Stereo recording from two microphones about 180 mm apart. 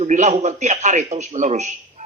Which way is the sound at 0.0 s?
40° right (ahead or behind).